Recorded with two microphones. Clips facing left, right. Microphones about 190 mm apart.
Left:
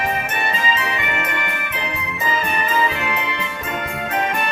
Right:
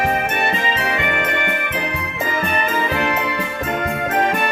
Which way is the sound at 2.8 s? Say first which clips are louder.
Right 2 dB; 55° right (ahead or behind).